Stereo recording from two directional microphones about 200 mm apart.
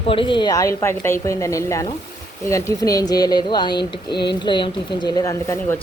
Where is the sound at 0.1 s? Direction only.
25° left (ahead or behind).